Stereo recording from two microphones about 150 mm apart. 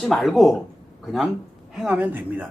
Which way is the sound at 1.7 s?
10° right (ahead or behind).